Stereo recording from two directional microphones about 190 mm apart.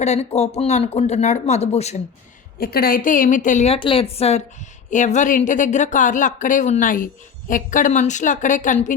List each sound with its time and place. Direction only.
0.0 s speech: 35° left (ahead or behind)
2.6 s speech: 50° left (ahead or behind)